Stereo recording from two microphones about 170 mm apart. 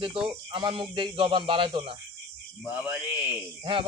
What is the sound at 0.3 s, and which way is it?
Speech, 30° right (ahead or behind).